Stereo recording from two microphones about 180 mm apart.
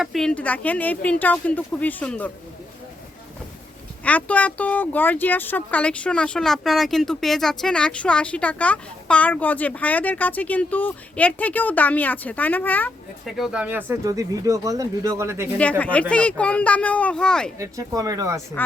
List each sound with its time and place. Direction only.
0.0 s speech: centre (ahead or behind)
4.0 s speech: 10° left (ahead or behind)
13.2 s speech: centre (ahead or behind)
15.8 s speech: 5° left (ahead or behind)
17.6 s speech: 20° right (ahead or behind)